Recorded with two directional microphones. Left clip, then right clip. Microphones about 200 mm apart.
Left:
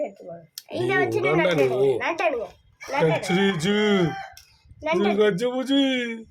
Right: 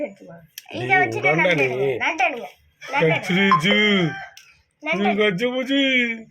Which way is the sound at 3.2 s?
5° left (ahead or behind).